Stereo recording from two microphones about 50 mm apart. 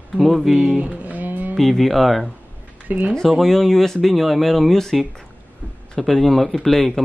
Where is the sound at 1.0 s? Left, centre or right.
Right.